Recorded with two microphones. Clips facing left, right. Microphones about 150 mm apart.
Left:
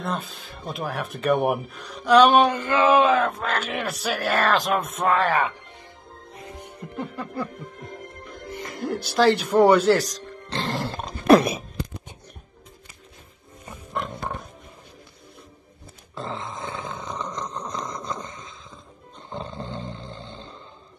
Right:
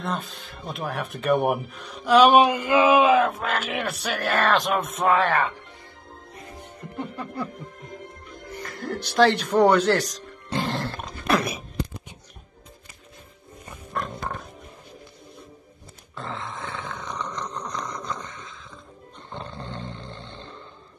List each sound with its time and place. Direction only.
0.0 s speech: centre (ahead or behind)
7.0 s snicker: centre (ahead or behind)
8.5 s music: 15° left (ahead or behind)
9.0 s speech: centre (ahead or behind)
11.0 s throat clearing: 30° left (ahead or behind)
13.9 s pig: 15° left (ahead or behind)
16.6 s wild animals: 15° left (ahead or behind)
17.6 s a sound: 30° left (ahead or behind)
19.3 s roaring cats: centre (ahead or behind)